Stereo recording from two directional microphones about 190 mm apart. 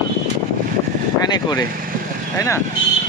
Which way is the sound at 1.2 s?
20° left (ahead or behind).